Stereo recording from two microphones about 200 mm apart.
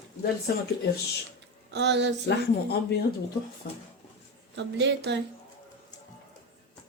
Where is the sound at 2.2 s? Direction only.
55° left (ahead or behind).